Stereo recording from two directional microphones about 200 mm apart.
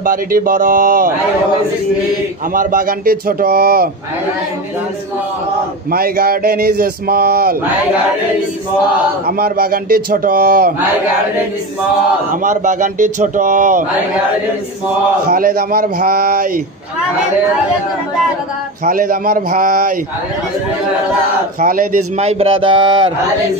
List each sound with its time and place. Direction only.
0.0 s speech: 45° right (ahead or behind)
2.5 s speech: 45° right (ahead or behind)
5.9 s speech: 50° right (ahead or behind)
9.2 s speech: 50° right (ahead or behind)
12.4 s a man's voice: 40° right (ahead or behind)
15.2 s speech: 45° right (ahead or behind)
18.9 s speech: 45° right (ahead or behind)
21.5 s speech: 45° right (ahead or behind)
22.2 s speech: 30° right (ahead or behind)